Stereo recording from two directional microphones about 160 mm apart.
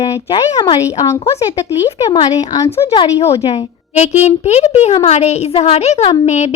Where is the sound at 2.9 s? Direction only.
35° left (ahead or behind).